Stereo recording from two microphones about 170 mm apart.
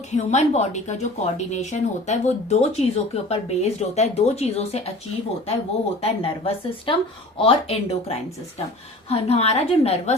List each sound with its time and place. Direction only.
0.1 s speech: 40° left (ahead or behind)
6.0 s speech: 35° left (ahead or behind)